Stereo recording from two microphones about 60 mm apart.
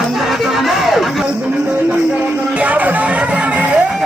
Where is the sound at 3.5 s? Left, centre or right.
Right.